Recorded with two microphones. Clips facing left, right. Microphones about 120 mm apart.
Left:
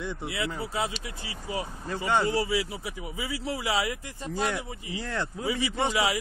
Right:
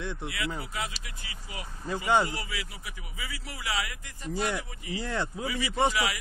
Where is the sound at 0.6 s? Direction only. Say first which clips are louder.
Left 5 dB; 25° left (ahead or behind).